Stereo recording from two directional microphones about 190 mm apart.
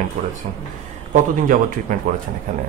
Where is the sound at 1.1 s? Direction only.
45° right (ahead or behind).